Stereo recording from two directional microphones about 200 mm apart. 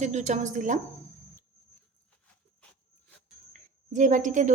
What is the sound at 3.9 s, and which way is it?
Speech, 40° right (ahead or behind).